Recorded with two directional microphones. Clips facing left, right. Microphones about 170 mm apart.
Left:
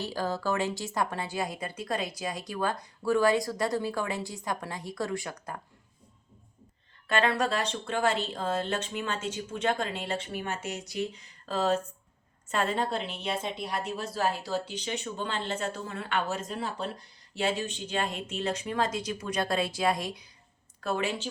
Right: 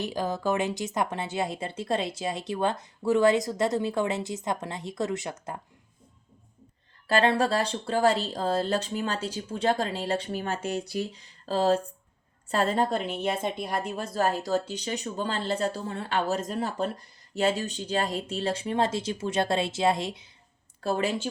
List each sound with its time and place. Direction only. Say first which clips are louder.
0.0 s speech: right 2 dB; 20° right (ahead or behind)
7.1 s speech: right 4 dB; 30° right (ahead or behind)
20.8 s speech: right 3 dB; 35° right (ahead or behind)